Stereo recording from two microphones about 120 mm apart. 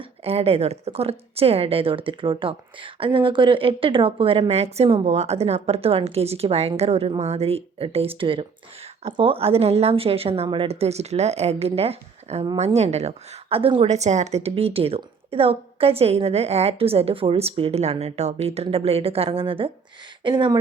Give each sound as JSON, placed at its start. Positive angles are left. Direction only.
{"t": 0.0, "sound": "a woman's voice", "side_deg": -55}
{"t": 13.8, "sound": "a woman's voice", "side_deg": -70}